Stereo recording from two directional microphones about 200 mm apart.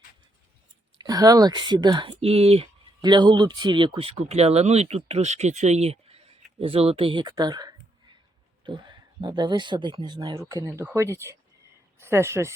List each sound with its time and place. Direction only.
0.9 s speech: 20° right (ahead or behind)